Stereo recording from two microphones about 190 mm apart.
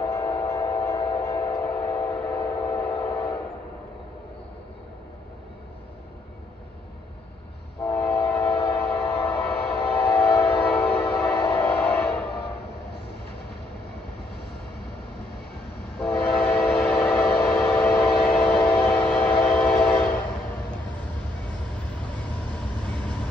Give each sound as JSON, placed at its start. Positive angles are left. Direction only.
{"t": 0.0, "sound": "train", "side_deg": 20}
{"t": 7.8, "sound": "train", "side_deg": 10}
{"t": 16.0, "sound": "train", "side_deg": 5}